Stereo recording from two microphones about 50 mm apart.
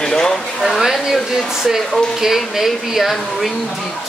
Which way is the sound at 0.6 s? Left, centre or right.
Centre.